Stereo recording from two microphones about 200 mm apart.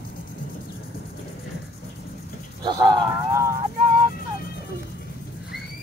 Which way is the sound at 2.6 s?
20° right (ahead or behind).